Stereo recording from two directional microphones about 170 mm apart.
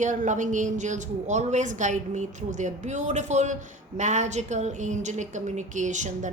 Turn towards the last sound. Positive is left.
turn(degrees=-45)  # may be behind; listen again after turning